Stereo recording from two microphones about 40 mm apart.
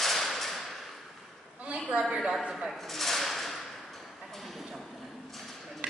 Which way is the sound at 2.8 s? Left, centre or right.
Centre.